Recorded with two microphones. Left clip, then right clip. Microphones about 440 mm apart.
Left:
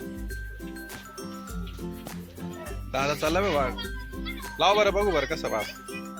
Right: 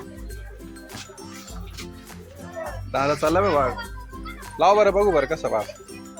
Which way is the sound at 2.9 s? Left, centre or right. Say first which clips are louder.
Right 5 dB; left.